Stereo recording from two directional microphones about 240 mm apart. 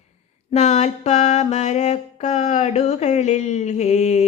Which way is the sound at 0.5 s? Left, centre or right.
Left.